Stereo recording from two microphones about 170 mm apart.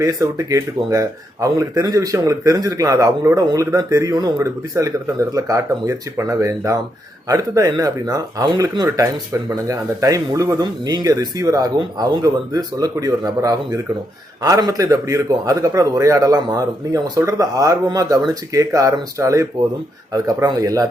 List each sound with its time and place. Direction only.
0.0 s speech: 20° right (ahead or behind)